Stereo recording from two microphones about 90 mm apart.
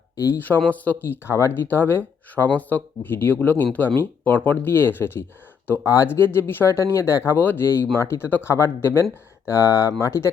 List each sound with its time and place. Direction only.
0.3 s speech: 20° left (ahead or behind)